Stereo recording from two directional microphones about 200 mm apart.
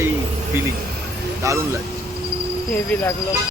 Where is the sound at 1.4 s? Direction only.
15° right (ahead or behind).